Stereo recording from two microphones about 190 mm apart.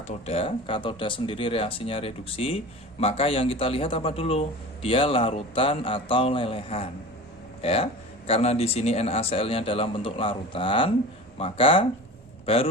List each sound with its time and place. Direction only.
0.3 s speech: 30° left (ahead or behind)